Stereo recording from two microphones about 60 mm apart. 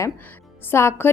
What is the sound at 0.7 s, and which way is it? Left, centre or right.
Speech, left.